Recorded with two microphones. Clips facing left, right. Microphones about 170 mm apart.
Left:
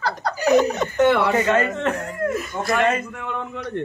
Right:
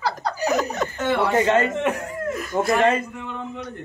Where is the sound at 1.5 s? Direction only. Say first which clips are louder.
Even; 15° right (ahead or behind).